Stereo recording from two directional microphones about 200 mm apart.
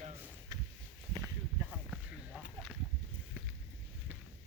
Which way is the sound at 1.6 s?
5° right (ahead or behind).